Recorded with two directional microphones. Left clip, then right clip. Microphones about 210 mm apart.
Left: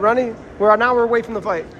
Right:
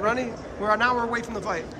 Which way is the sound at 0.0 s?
Centre (ahead or behind).